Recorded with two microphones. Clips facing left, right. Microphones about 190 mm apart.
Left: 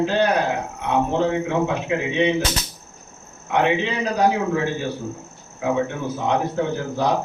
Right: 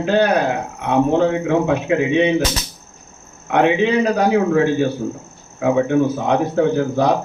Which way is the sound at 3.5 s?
55° right (ahead or behind).